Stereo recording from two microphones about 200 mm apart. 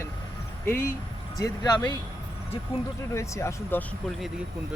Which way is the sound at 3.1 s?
15° left (ahead or behind).